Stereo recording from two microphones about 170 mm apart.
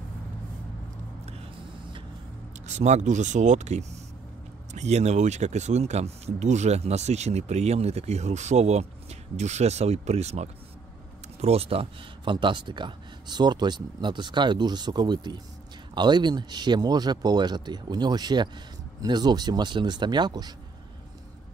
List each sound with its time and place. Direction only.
2.6 s speech: 40° right (ahead or behind); by 20.5 s 25° right (ahead or behind)